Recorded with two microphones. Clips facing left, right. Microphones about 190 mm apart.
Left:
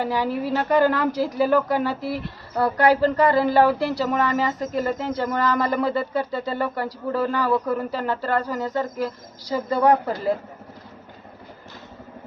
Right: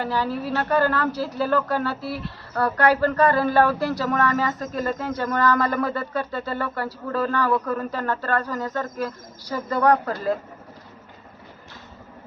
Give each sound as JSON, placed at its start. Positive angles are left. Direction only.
{"t": 0.0, "sound": "speech", "side_deg": 15}